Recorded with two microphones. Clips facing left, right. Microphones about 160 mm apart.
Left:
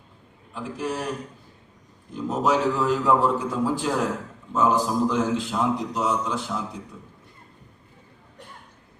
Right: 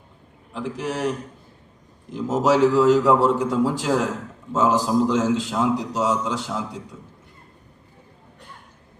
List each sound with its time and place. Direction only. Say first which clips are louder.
0.5 s a man's voice: right 2 dB; 85° right
2.1 s a man's voice: right 4 dB; 90° right